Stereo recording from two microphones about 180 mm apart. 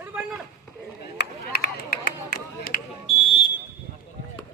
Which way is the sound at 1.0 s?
65° left (ahead or behind).